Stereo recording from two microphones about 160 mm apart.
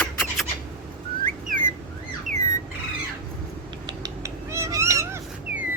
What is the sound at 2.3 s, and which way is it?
Squawk, 50° right (ahead or behind).